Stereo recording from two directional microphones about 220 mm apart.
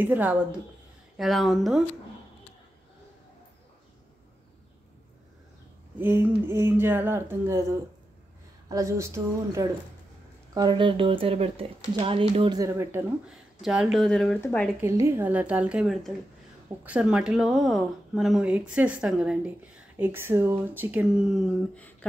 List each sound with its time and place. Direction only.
0.0 s speech: 5° right (ahead or behind)
5.9 s speech: 10° right (ahead or behind)
8.6 s speech: 15° right (ahead or behind); by 14.7 s 5° left (ahead or behind)
14.8 s speech: 10° right (ahead or behind)